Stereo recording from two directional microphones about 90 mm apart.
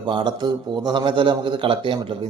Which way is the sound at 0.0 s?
60° right (ahead or behind).